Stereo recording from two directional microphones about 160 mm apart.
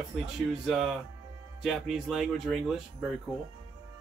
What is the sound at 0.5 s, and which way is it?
Speech, centre (ahead or behind).